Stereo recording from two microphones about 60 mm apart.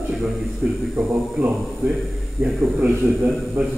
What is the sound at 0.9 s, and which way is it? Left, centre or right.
A man's voice, right.